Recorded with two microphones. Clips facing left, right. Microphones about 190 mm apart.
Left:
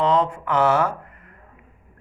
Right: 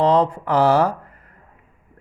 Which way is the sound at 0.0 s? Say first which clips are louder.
Right 3 dB; 35° right (ahead or behind).